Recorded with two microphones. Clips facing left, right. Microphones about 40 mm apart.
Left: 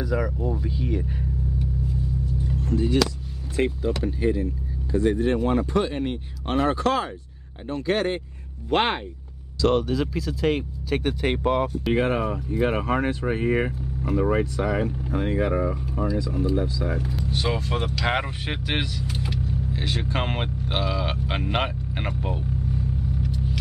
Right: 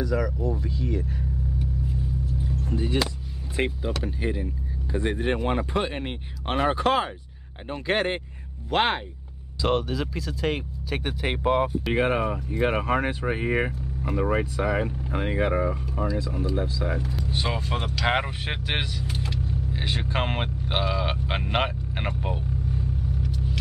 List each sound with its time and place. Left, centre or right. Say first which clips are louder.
0.0 s speech: even; centre
2.7 s speech: left 5 dB; right
4.9 s speech: left 4 dB; right
8.6 s speech: left 1 dB; centre
15.1 s speech: left 1 dB; right
15.7 s speech: left 2 dB; centre
17.0 s speech: left 2 dB; centre
17.3 s speech: left 2 dB; centre
19.4 s vehicle: left 2 dB; centre